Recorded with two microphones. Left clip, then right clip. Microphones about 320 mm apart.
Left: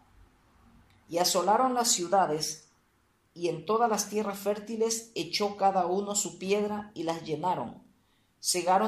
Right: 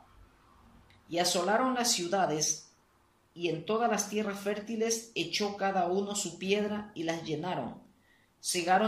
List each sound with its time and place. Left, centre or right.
1.0 s speech: centre